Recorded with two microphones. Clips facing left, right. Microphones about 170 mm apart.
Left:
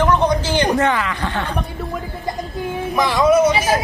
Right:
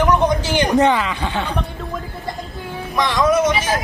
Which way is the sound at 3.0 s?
5° left (ahead or behind).